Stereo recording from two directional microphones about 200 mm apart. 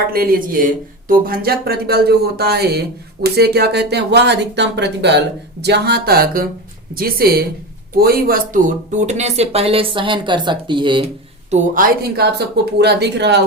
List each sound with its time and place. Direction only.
0.1 s speech: 45° right (ahead or behind); by 11.0 s 25° right (ahead or behind)
11.5 s speech: 40° right (ahead or behind); by 13.4 s 60° right (ahead or behind)